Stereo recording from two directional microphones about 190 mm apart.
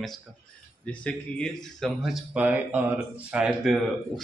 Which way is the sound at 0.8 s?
5° left (ahead or behind).